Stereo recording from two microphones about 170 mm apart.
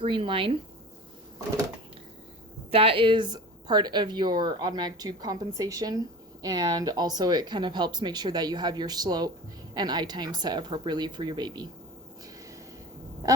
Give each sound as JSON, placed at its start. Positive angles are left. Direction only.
{"t": 0.0, "sound": "speech", "side_deg": -30}
{"t": 2.7, "sound": "speech", "side_deg": -35}